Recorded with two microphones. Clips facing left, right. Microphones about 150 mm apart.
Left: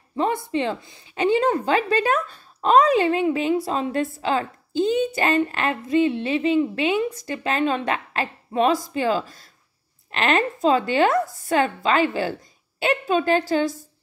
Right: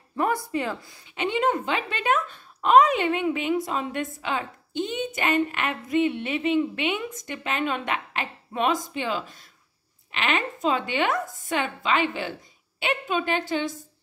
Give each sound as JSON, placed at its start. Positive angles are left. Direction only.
{"t": 0.2, "sound": "speech", "side_deg": 25}
{"t": 1.1, "sound": "speech", "side_deg": 35}